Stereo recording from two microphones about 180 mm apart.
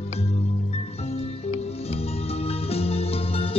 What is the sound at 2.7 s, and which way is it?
Music, 35° left (ahead or behind).